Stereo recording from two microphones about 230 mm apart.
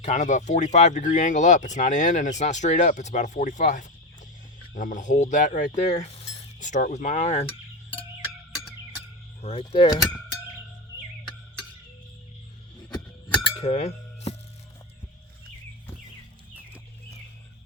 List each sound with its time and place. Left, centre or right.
0.0 s speech: left
9.4 s speech: left
12.9 s glass: centre
13.4 s chink: left